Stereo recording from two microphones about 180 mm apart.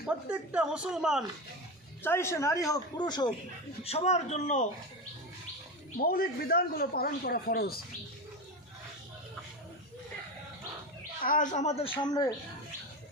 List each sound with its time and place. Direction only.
0.0 s a woman's voice: 5° right (ahead or behind)
2.0 s speech: 15° left (ahead or behind)
3.8 s a man's voice: 35° left (ahead or behind)
6.0 s a man's voice: 55° left (ahead or behind)
11.2 s speech: 50° left (ahead or behind)
12.0 s speech: 20° left (ahead or behind)